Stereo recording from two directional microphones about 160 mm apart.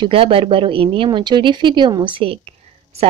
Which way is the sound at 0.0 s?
35° right (ahead or behind).